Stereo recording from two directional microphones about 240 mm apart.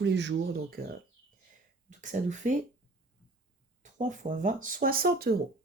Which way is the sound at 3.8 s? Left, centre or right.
Right.